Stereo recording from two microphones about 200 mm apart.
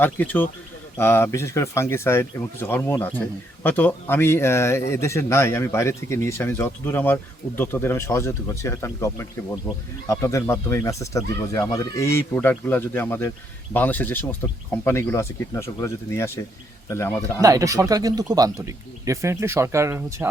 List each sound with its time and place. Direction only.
0.0 s speech: 10° left (ahead or behind)
17.4 s a man's voice: 15° right (ahead or behind)